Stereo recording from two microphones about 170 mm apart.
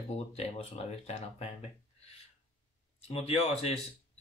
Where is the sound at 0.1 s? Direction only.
35° left (ahead or behind).